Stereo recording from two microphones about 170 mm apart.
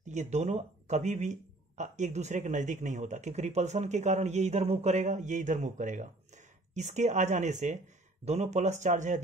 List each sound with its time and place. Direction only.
0.0 s speech: 45° right (ahead or behind)